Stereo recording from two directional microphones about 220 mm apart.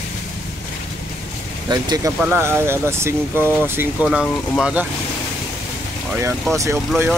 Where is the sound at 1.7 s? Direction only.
20° right (ahead or behind).